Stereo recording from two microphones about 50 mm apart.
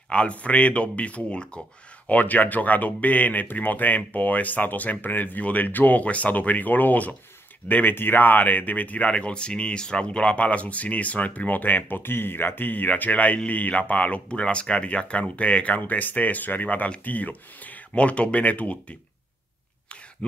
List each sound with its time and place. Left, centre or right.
0.1 s speech: left
2.0 s speech: left